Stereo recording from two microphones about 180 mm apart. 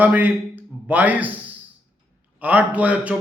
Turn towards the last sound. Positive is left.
turn(degrees=-5)  # may be behind; listen again after turning